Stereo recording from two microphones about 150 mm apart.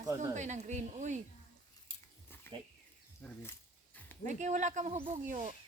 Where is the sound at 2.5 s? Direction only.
15° left (ahead or behind).